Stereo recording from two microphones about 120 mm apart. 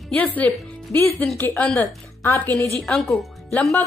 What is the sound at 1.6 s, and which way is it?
Speech, 5° left (ahead or behind).